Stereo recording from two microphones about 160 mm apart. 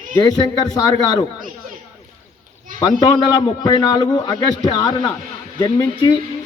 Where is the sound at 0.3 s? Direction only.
25° left (ahead or behind).